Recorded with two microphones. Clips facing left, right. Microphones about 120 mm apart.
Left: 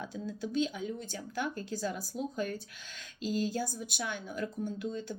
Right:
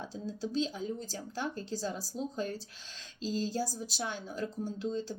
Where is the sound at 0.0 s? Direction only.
30° right (ahead or behind).